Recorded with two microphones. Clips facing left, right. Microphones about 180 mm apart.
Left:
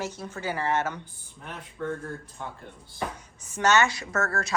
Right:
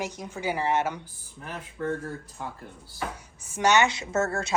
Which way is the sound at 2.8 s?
10° right (ahead or behind).